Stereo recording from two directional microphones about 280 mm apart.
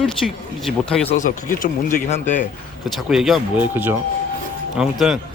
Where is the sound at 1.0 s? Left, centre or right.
Left.